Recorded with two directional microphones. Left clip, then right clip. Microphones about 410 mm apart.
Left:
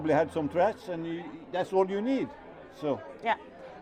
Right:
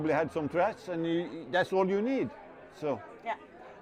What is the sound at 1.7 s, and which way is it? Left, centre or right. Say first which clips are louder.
Speech: left 1 dB; centre.